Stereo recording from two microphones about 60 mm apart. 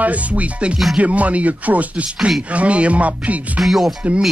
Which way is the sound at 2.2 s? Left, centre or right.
Centre.